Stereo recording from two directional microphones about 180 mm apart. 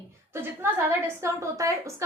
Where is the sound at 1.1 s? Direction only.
15° right (ahead or behind).